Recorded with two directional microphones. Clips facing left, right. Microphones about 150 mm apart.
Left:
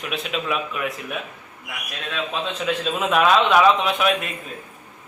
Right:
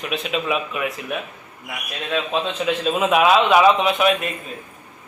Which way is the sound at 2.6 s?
5° right (ahead or behind).